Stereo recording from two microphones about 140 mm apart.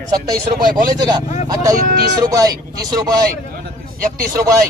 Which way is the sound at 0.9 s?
30° right (ahead or behind).